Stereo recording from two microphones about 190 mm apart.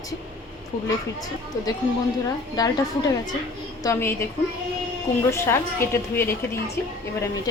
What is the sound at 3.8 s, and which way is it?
Speech, 15° left (ahead or behind).